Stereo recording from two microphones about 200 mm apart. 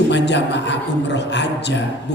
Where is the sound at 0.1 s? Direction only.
60° left (ahead or behind).